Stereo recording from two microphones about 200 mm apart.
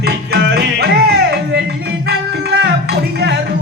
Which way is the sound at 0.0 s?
50° right (ahead or behind).